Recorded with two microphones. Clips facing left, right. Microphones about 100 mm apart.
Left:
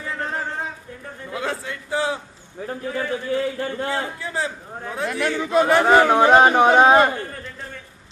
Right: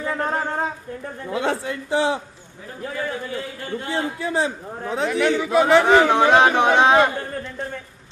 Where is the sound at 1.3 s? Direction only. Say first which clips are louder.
Right 4 dB; 25° right (ahead or behind).